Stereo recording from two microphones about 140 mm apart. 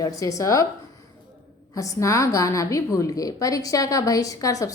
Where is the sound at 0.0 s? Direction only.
25° left (ahead or behind).